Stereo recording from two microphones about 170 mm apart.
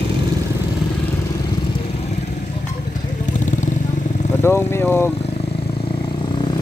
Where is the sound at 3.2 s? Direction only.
45° left (ahead or behind).